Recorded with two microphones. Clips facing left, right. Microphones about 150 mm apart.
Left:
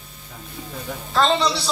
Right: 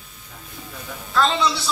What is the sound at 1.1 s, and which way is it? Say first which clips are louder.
Speech: left 1 dB; 35° left (ahead or behind).